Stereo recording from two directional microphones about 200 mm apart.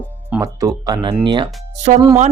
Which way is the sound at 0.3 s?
15° right (ahead or behind).